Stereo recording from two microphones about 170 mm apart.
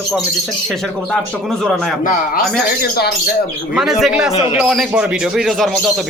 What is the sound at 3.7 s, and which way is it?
Speech, centre (ahead or behind).